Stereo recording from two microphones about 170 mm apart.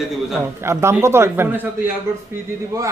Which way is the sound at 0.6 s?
15° right (ahead or behind).